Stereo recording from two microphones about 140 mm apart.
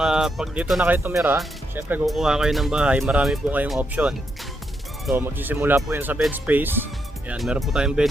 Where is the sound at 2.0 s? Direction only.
Centre (ahead or behind).